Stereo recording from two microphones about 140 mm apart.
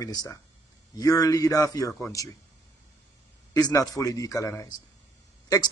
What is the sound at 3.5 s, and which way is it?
Speech, 25° left (ahead or behind).